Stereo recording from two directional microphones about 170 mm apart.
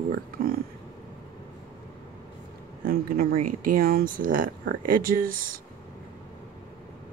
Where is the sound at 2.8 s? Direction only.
60° right (ahead or behind).